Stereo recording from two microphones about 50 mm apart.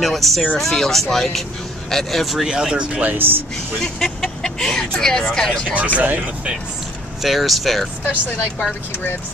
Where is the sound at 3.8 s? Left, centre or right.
Centre.